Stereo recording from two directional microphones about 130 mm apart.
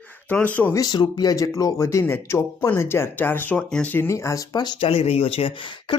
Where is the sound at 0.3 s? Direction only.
10° left (ahead or behind).